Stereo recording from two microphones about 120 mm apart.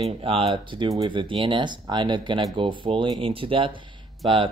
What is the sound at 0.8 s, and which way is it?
Speech, 30° right (ahead or behind).